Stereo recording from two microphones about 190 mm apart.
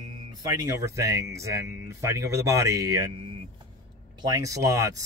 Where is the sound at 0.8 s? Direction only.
15° right (ahead or behind).